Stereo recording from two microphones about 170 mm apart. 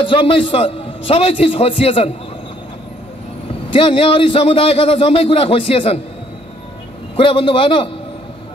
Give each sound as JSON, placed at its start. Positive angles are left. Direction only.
{"t": 0.0, "sound": "a man's voice", "side_deg": 30}
{"t": 3.7, "sound": "a man's voice", "side_deg": 30}
{"t": 7.2, "sound": "a man's voice", "side_deg": 30}